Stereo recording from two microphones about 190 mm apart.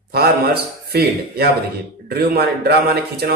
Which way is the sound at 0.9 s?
55° right (ahead or behind).